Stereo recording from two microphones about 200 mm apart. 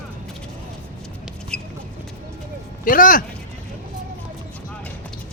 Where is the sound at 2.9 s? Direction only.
45° left (ahead or behind).